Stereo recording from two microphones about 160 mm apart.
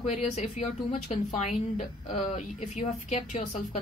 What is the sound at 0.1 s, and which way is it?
Speech, 45° left (ahead or behind).